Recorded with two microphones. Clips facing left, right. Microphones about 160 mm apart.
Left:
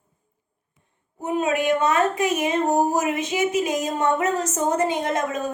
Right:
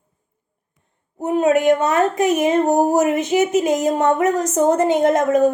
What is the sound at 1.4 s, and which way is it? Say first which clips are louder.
Speech: right 6 dB; 45° right (ahead or behind).